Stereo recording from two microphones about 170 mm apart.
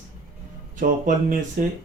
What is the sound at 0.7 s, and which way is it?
Speech, 50° right (ahead or behind).